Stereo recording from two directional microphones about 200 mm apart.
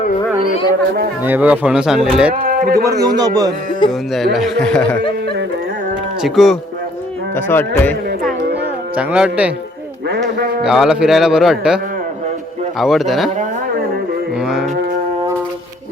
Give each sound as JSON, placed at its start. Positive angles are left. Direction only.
{"t": 1.2, "sound": "speech", "side_deg": -10}
{"t": 2.3, "sound": "speech", "side_deg": -45}
{"t": 3.0, "sound": "a man's voice", "side_deg": -20}
{"t": 3.8, "sound": "speech", "side_deg": 0}
{"t": 6.2, "sound": "speech", "side_deg": 0}
{"t": 7.3, "sound": "music", "side_deg": 10}
{"t": 9.0, "sound": "speech", "side_deg": -5}
{"t": 10.3, "sound": "speech", "side_deg": -45}
{"t": 10.6, "sound": "speech", "side_deg": -5}
{"t": 12.8, "sound": "speech", "side_deg": 0}
{"t": 14.4, "sound": "livestock", "side_deg": 0}